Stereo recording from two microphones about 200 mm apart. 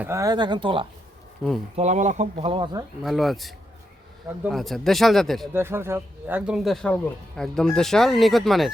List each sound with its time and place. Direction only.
0.0 s speech: 15° right (ahead or behind)
1.7 s speech: 35° right (ahead or behind)
3.0 s speech: centre (ahead or behind)
5.5 s speech: 10° right (ahead or behind)